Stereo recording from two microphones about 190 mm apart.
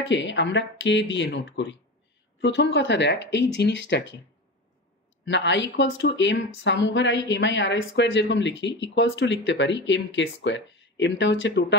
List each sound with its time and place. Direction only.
0.0 s speech: 70° left (ahead or behind)
5.2 s speech: 70° left (ahead or behind)